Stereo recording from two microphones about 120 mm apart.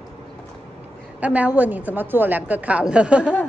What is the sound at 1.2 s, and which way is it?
A woman's voice, 10° right (ahead or behind).